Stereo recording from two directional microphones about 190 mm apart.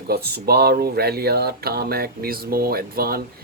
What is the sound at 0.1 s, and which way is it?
Speech, 55° right (ahead or behind).